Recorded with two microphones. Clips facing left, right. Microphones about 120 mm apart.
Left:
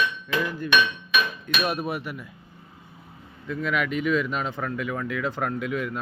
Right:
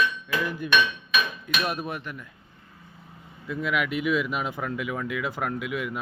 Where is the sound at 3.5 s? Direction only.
5° right (ahead or behind).